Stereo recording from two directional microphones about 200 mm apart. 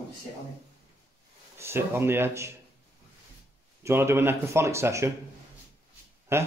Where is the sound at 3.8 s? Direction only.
10° right (ahead or behind).